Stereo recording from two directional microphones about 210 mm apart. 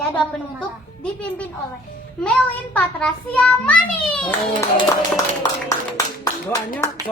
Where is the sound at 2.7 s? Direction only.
5° left (ahead or behind).